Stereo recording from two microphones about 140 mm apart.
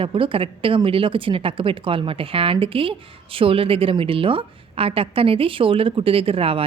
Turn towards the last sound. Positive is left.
turn(degrees=-40)  # may be behind; listen again after turning